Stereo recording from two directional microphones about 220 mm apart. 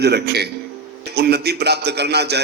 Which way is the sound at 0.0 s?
50° right (ahead or behind).